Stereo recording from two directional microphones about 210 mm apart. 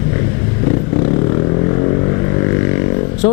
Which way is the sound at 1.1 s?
20° left (ahead or behind).